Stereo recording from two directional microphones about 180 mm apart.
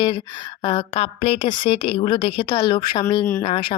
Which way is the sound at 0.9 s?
35° left (ahead or behind).